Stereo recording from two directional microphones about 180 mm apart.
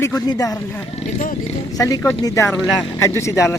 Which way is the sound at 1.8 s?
20° left (ahead or behind).